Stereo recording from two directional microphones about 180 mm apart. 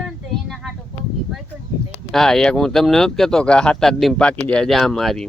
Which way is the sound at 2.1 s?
Centre (ahead or behind).